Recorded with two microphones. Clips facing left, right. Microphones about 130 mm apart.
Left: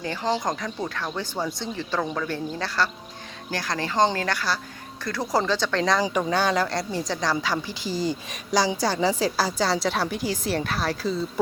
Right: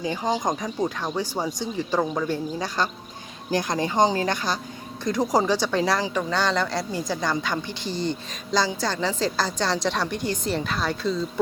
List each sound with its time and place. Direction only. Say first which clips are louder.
0.0 s speech: right 1 dB; 15° right (ahead or behind)
6.0 s a woman's voice: left 2 dB; 10° left (ahead or behind)